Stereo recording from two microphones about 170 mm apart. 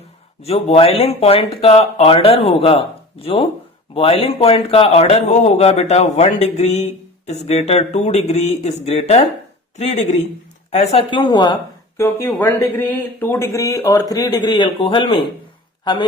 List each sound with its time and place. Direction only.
0.4 s a man's voice: 35° left (ahead or behind)
11.9 s speech: 15° left (ahead or behind)